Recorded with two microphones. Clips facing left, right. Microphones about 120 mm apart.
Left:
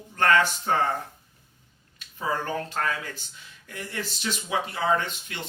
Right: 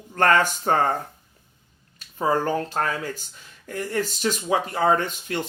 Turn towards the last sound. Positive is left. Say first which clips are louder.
# right 3 dB
turn(degrees=-45)  # may be behind; listen again after turning